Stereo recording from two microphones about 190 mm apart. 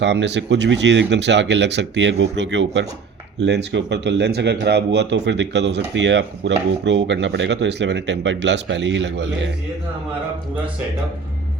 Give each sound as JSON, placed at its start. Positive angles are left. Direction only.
{"t": 0.0, "sound": "speech", "side_deg": -65}